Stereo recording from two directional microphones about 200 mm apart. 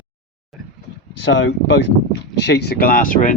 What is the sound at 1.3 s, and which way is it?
Speech, 65° left (ahead or behind).